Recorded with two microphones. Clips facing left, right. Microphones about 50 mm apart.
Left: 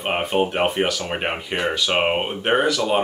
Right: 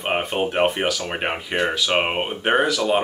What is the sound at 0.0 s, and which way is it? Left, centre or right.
Speech, centre.